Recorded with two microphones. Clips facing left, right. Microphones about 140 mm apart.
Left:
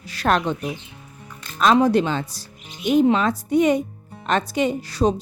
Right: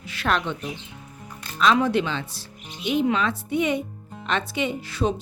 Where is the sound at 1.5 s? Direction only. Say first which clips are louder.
Left 4 dB; 40° left (ahead or behind).